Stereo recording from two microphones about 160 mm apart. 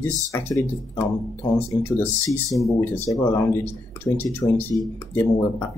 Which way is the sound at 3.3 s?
15° left (ahead or behind).